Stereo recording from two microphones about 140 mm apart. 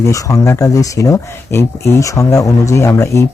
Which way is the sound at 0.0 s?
25° left (ahead or behind).